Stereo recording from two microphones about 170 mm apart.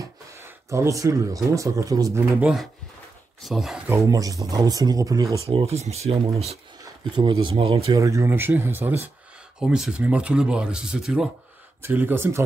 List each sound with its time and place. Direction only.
0.0 s speech: 15° right (ahead or behind)
2.4 s speech: centre (ahead or behind)
4.1 s speech: 20° right (ahead or behind)
5.5 s speech: 35° right (ahead or behind)
8.0 s speech: 20° right (ahead or behind)